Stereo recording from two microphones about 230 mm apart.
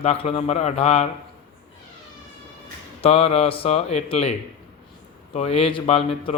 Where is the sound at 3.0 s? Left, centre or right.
Left.